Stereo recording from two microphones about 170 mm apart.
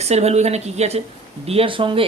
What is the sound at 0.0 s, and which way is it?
Speech, 40° right (ahead or behind).